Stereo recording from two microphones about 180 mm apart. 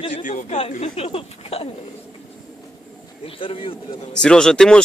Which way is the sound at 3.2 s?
30° left (ahead or behind).